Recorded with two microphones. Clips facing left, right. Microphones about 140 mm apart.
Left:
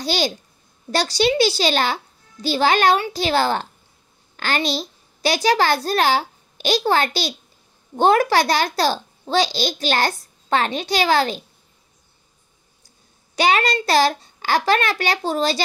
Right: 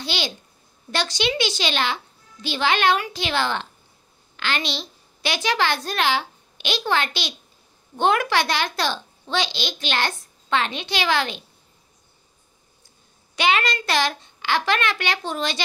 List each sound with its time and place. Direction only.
0.0 s a child's voice: 40° left (ahead or behind)
13.4 s a child's voice: 35° left (ahead or behind)